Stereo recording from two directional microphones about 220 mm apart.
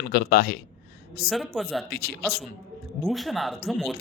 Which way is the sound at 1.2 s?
Centre (ahead or behind).